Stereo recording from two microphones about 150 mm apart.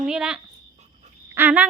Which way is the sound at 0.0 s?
5° right (ahead or behind).